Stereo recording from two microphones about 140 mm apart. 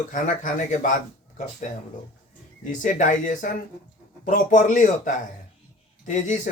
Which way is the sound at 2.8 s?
65° left (ahead or behind).